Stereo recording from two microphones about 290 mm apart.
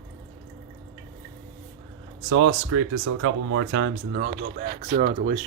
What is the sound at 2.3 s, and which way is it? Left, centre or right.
Speech, right.